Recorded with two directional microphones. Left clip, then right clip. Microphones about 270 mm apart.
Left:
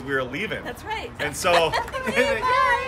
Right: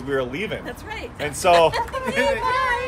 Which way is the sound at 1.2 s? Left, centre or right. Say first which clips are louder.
Right 4 dB; centre.